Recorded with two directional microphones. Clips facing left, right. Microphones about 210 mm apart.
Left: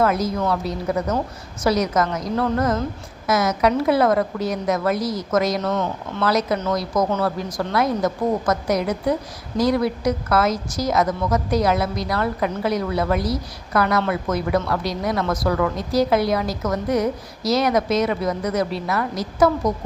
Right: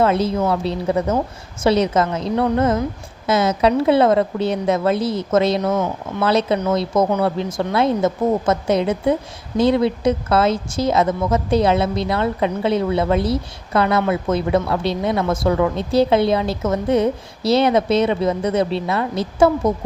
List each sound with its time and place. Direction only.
0.0 s a woman's voice: 30° right (ahead or behind)
5.7 s speech: 10° right (ahead or behind)
6.2 s speech: 25° right (ahead or behind)